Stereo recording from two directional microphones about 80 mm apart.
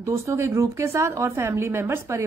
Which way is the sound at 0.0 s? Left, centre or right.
Right.